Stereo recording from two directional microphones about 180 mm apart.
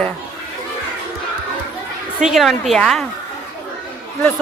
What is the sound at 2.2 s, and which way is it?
Speech, centre (ahead or behind).